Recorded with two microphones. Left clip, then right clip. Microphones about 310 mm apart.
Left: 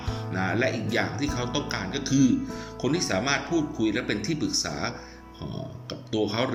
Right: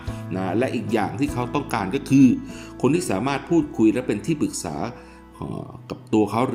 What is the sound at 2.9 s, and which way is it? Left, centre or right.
Speech, right.